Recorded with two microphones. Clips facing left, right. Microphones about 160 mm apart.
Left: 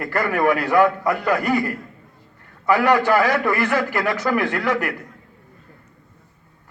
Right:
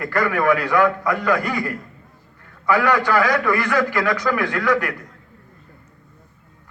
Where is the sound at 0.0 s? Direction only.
30° left (ahead or behind).